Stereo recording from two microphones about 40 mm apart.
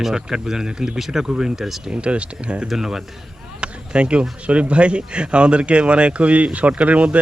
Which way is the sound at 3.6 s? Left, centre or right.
Right.